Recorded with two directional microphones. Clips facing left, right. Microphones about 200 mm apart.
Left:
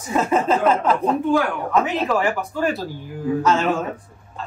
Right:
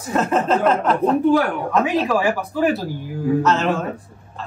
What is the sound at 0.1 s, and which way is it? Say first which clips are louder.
Speech: even; 5° left (ahead or behind).